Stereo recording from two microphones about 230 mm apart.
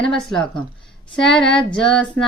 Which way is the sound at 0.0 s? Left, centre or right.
Centre.